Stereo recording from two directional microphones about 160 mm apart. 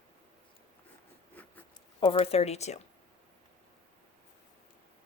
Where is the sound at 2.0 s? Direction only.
35° left (ahead or behind).